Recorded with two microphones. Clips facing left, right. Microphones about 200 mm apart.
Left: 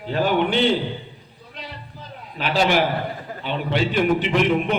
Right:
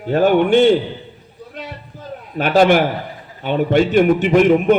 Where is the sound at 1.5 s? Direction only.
50° right (ahead or behind).